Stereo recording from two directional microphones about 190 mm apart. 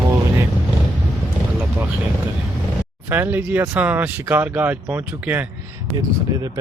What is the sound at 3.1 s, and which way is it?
Speech, 10° right (ahead or behind).